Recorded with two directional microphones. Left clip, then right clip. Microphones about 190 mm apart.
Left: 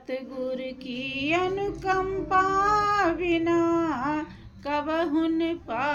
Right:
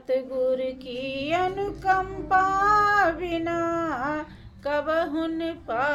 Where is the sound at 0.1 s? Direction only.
20° right (ahead or behind).